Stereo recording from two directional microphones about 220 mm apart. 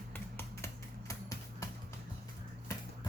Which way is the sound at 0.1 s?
10° left (ahead or behind).